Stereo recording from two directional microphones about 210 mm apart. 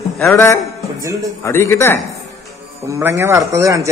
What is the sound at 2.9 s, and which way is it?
Speech, 10° right (ahead or behind).